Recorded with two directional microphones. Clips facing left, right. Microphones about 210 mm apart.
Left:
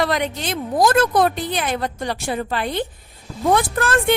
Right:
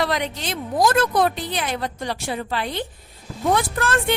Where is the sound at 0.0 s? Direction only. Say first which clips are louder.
Left 3 dB; 50° left (ahead or behind).